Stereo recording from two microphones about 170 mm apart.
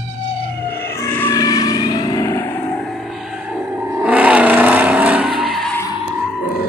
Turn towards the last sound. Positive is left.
turn(degrees=0)  # may be behind; listen again after turning